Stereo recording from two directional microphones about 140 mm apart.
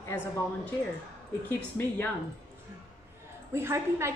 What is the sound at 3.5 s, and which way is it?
Speech, 20° right (ahead or behind).